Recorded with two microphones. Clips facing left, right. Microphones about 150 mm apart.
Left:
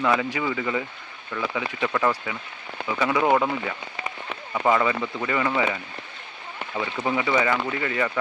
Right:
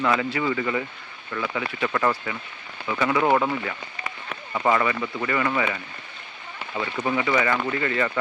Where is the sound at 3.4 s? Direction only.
15° left (ahead or behind).